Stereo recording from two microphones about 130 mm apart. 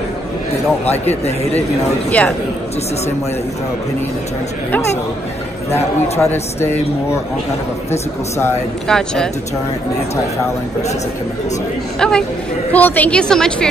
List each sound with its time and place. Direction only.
2.0 s a woman's voice: 10° left (ahead or behind)
5.7 s a man's voice: 20° left (ahead or behind)
8.8 s speech: 5° left (ahead or behind)
12.0 s a woman's voice: 5° left (ahead or behind)